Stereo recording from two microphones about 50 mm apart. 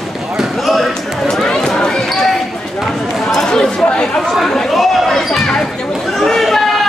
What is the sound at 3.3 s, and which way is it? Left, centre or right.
Chatter, centre.